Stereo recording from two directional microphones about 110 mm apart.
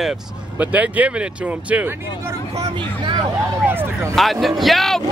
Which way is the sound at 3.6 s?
20° right (ahead or behind).